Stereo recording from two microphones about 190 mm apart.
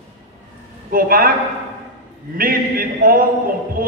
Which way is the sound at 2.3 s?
50° right (ahead or behind).